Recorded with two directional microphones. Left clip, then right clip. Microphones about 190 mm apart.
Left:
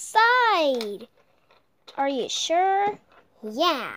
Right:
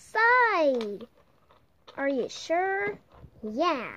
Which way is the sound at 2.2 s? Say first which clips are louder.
Left 6 dB; 5° left (ahead or behind).